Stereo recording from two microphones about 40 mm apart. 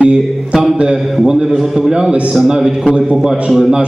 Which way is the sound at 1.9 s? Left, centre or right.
Centre.